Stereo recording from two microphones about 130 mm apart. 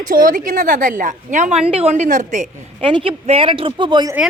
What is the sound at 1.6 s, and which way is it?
Speech, 50° right (ahead or behind).